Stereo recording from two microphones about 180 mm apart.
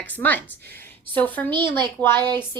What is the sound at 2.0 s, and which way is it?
Speech, 10° left (ahead or behind).